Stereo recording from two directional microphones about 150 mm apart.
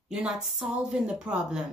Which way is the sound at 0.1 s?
5° right (ahead or behind).